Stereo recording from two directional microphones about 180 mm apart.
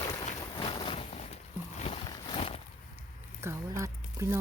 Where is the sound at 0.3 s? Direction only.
20° left (ahead or behind).